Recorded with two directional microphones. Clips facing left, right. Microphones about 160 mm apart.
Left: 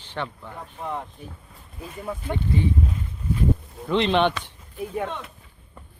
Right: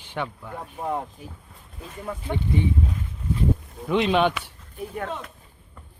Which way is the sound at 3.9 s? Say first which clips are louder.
Even; 5° right (ahead or behind).